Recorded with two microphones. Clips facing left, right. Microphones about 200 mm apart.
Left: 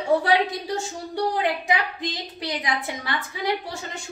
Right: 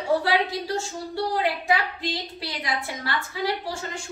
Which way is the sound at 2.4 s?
20° left (ahead or behind).